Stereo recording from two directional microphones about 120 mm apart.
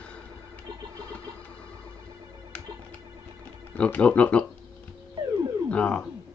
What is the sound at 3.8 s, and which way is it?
Speech, 10° left (ahead or behind).